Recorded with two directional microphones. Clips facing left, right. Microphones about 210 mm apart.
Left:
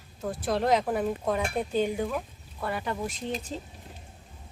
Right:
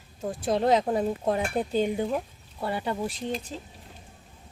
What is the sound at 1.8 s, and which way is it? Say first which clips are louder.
Speech: right 1 dB; 20° right (ahead or behind).